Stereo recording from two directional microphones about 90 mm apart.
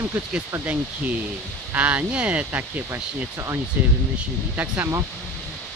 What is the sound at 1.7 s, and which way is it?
Speech, 20° right (ahead or behind).